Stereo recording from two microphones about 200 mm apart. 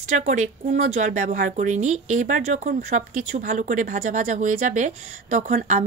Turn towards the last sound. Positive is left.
turn(degrees=-35)  # may be behind; listen again after turning